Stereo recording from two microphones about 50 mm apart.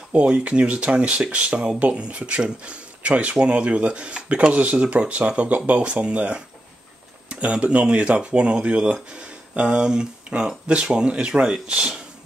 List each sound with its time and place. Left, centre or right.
0.1 s speech: right